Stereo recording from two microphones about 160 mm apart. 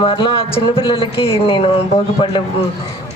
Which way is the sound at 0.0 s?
35° left (ahead or behind).